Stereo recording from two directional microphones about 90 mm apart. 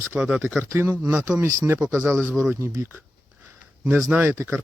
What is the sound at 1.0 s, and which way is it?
Speech, 10° right (ahead or behind).